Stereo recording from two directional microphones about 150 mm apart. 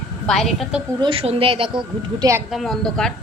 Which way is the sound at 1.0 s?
35° right (ahead or behind).